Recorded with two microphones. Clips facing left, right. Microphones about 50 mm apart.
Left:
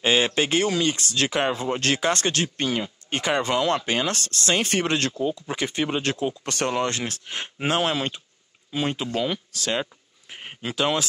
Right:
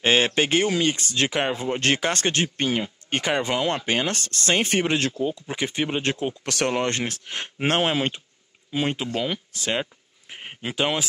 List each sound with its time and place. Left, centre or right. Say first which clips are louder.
0.0 s speech: right 1 dB; right
3.3 s speech: left 2 dB; right
4.8 s speech: right 1 dB; centre
5.6 s speech: right 1 dB; right
6.4 s speech: right 1 dB; right
6.7 s speech: right 1 dB; right
7.8 s speech: right 2 dB; right
8.7 s speech: even; right